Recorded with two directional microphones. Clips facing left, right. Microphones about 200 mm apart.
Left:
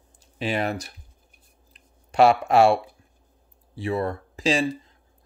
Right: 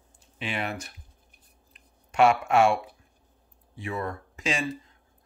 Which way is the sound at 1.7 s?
35° left (ahead or behind).